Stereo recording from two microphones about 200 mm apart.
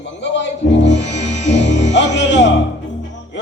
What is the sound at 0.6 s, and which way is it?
Speech, 60° left (ahead or behind).